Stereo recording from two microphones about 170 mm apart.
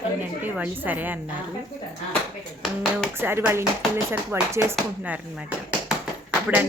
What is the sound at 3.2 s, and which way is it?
Speech, 15° right (ahead or behind).